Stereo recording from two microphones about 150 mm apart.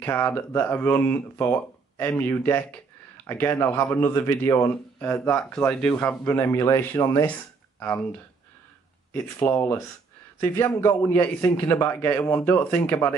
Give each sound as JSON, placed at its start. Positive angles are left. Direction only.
{"t": 0.0, "sound": "speech", "side_deg": 15}
{"t": 9.4, "sound": "speech", "side_deg": 15}